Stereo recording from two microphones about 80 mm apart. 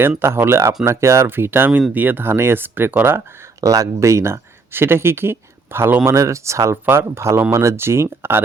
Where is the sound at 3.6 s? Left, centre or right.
Right.